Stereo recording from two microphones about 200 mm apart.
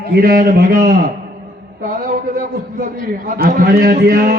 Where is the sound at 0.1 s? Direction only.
50° right (ahead or behind).